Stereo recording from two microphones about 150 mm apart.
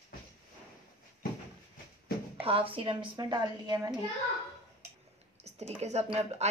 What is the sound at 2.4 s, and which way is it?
A woman's voice, 40° right (ahead or behind).